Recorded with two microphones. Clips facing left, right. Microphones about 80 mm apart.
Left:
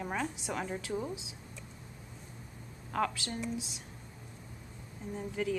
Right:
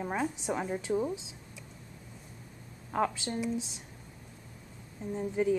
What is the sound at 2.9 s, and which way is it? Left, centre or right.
Speech, right.